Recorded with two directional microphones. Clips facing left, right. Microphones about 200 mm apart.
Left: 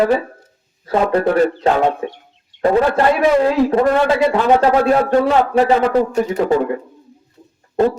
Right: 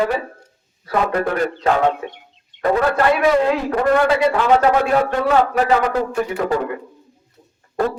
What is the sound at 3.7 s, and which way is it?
A man's voice, 25° left (ahead or behind).